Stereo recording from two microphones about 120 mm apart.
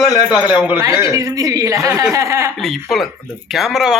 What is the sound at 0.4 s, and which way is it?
Speech, 10° right (ahead or behind).